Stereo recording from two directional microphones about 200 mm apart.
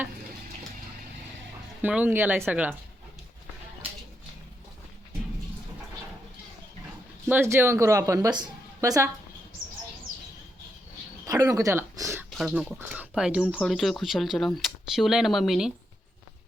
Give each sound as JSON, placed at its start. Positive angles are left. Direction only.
{"t": 1.8, "sound": "speech", "side_deg": -10}
{"t": 7.3, "sound": "a woman's voice", "side_deg": -10}
{"t": 11.3, "sound": "speech", "side_deg": -15}
{"t": 12.3, "sound": "speech", "side_deg": 0}